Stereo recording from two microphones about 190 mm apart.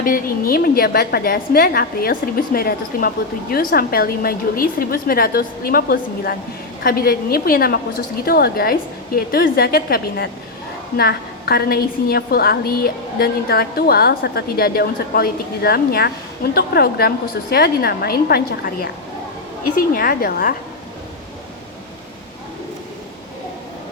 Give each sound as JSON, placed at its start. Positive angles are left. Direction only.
{"t": 0.0, "sound": "a woman's voice", "side_deg": 50}